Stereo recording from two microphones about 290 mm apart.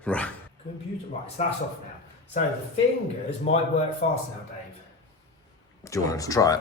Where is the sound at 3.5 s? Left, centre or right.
Left.